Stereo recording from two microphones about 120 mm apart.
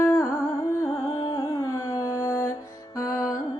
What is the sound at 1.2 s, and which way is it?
Music, 45° left (ahead or behind).